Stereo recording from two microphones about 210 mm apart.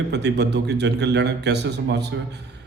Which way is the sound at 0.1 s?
55° right (ahead or behind).